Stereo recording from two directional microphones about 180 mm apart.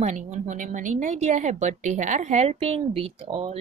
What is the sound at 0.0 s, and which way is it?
A woman's voice, 40° right (ahead or behind).